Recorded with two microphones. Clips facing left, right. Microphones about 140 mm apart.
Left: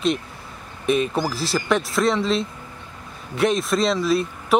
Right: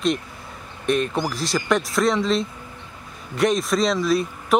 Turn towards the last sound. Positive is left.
turn(degrees=0)  # may be behind; listen again after turning